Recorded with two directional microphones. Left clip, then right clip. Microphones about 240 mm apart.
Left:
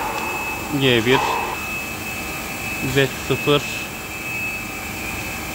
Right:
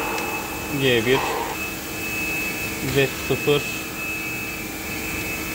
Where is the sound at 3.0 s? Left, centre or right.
Left.